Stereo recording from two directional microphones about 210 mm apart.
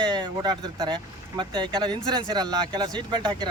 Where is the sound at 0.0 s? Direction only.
20° right (ahead or behind).